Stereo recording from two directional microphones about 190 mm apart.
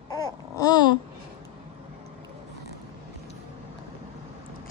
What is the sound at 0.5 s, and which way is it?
Babbling, 20° left (ahead or behind).